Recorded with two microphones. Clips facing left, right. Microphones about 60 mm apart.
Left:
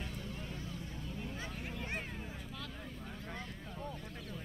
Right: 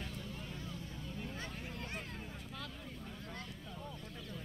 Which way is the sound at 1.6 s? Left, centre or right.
Centre.